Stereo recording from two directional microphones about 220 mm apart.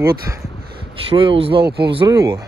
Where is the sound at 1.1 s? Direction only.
25° right (ahead or behind).